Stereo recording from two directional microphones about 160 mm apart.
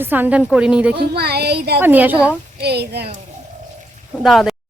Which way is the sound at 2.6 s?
90° right.